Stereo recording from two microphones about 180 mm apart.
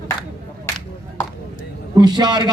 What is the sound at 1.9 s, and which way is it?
Speech, 20° right (ahead or behind).